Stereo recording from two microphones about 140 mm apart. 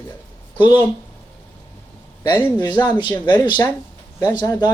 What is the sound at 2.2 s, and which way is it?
A man's voice, 30° left (ahead or behind).